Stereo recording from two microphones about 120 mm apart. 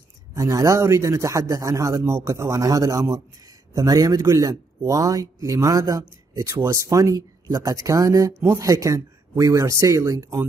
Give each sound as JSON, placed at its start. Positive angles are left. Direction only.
{"t": 0.3, "sound": "speech", "side_deg": -30}